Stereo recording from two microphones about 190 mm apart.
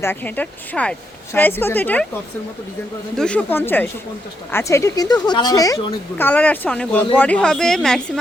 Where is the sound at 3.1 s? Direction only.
5° left (ahead or behind).